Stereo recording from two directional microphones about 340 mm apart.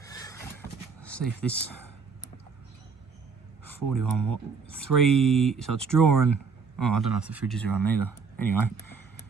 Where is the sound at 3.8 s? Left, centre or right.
Right.